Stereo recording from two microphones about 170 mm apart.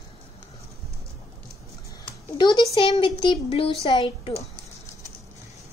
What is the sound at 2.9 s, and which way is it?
A woman's voice, 30° left (ahead or behind).